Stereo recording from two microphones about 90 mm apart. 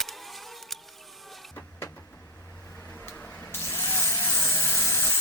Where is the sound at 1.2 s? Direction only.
Centre (ahead or behind).